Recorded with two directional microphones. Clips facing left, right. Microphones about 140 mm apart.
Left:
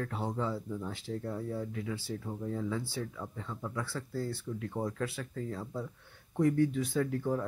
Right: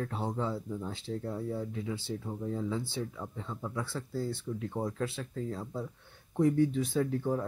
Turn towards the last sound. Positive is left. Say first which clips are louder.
# right 1 dB
turn(degrees=-20)  # may be behind; listen again after turning